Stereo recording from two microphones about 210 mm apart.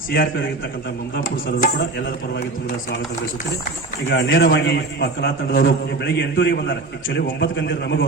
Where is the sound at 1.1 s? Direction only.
45° left (ahead or behind).